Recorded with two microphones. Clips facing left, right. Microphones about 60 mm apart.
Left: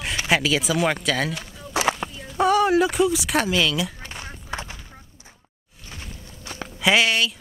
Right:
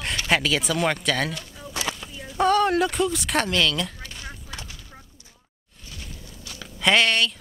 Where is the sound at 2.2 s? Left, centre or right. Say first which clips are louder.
Right 1 dB; centre.